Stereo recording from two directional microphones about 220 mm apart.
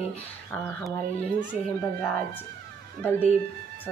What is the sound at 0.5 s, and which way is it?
Speech, 5° left (ahead or behind).